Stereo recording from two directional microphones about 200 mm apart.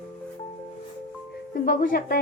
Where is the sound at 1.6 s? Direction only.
45° left (ahead or behind).